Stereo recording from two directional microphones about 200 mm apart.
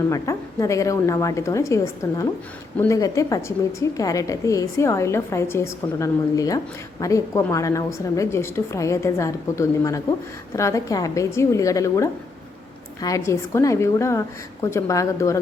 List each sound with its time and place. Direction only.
0.1 s a woman's voice: 15° left (ahead or behind)